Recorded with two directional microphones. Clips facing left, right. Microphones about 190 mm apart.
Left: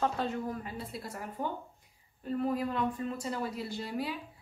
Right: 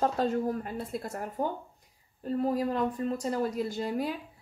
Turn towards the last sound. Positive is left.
turn(degrees=-45)  # may be behind; listen again after turning